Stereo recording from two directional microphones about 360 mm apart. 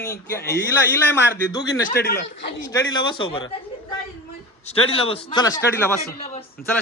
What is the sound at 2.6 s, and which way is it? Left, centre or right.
Speech, centre.